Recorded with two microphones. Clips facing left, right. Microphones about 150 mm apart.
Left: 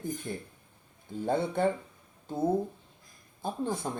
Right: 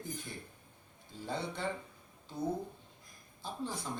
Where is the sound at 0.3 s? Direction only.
55° left (ahead or behind).